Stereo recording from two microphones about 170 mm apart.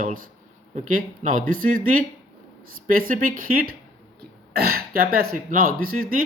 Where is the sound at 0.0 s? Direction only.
55° right (ahead or behind).